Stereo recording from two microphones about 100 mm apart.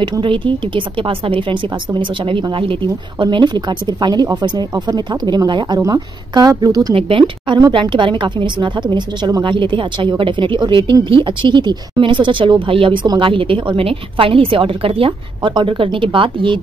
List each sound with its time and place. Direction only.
0.0 s speech: 55° right (ahead or behind); by 6.9 s 40° right (ahead or behind)
6.9 s a woman's voice: 65° right (ahead or behind)